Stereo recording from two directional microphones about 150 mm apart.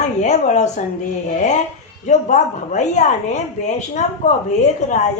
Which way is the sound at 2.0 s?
50° left (ahead or behind).